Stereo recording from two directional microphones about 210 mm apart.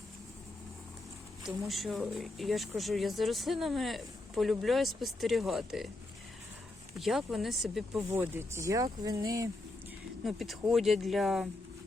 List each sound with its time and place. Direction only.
1.5 s speech: centre (ahead or behind)
7.0 s speech: centre (ahead or behind)
8.1 s speech: 10° right (ahead or behind)
10.2 s speech: centre (ahead or behind)